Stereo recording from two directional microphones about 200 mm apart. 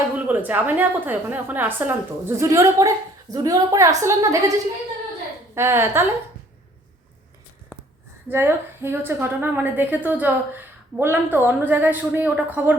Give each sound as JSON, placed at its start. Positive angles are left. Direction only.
{"t": 0.1, "sound": "a woman's voice", "side_deg": -10}
{"t": 5.5, "sound": "a woman's voice", "side_deg": -10}
{"t": 8.3, "sound": "a woman's voice", "side_deg": -10}